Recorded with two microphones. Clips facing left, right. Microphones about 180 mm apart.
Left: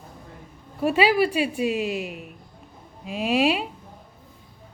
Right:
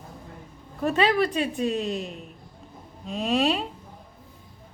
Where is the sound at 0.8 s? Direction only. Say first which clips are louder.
Left 2 dB; 10° left (ahead or behind).